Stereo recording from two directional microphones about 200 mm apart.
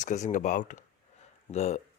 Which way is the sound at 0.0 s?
35° left (ahead or behind).